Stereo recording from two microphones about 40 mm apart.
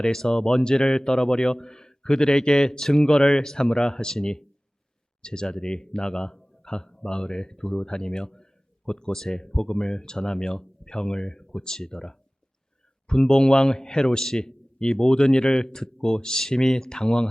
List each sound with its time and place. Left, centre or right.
0.0 s a man's voice: centre